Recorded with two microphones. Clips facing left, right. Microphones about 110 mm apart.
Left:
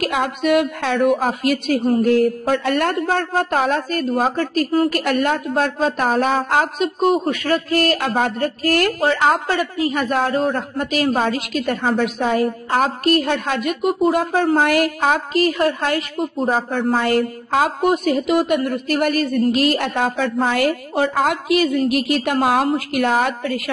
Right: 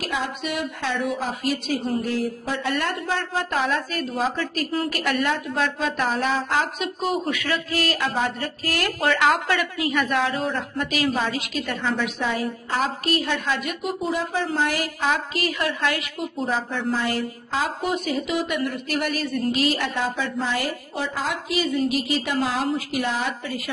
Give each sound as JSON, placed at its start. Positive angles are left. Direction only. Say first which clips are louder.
{"t": 0.0, "sound": "a woman's voice", "louder": "left 8 dB", "side_deg": 55}
{"t": 9.0, "sound": "a woman's voice", "louder": "right 1 dB", "side_deg": 30}